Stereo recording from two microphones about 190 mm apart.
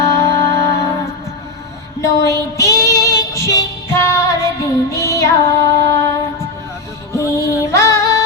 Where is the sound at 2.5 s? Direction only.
15° left (ahead or behind).